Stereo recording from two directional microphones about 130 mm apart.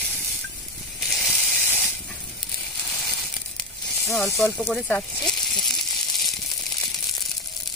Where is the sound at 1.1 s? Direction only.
Centre (ahead or behind).